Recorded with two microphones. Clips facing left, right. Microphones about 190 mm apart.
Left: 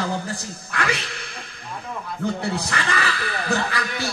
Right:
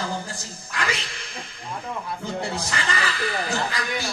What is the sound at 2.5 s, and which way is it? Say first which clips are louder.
Speech: left 2 dB; 60° left (ahead or behind).